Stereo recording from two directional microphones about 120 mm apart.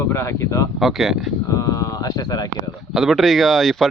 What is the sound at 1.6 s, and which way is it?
Speech, 30° left (ahead or behind).